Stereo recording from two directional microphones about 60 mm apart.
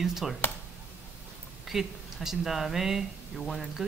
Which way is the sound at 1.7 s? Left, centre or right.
Centre.